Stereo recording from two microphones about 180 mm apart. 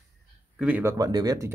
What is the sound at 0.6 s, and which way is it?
Speech, 10° right (ahead or behind).